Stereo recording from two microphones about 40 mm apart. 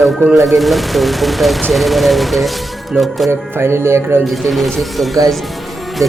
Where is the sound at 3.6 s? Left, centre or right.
Right.